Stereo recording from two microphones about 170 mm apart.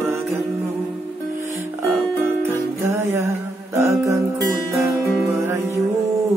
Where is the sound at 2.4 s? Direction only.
15° right (ahead or behind).